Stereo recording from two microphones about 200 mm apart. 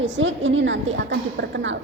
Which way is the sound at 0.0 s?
70° right (ahead or behind).